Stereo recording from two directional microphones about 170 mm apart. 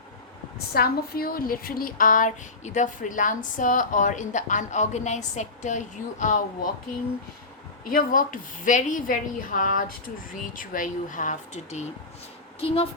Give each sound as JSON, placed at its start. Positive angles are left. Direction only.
{"t": 0.7, "sound": "speech", "side_deg": 65}
{"t": 7.9, "sound": "speech", "side_deg": 55}